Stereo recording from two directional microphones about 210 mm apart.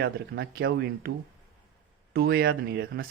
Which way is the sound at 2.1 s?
50° right (ahead or behind).